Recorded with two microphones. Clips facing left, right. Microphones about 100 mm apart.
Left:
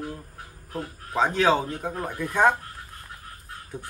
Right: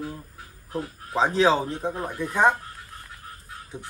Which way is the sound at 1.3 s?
30° right (ahead or behind).